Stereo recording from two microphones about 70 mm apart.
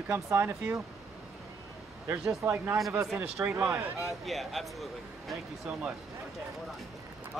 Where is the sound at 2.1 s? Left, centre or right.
Right.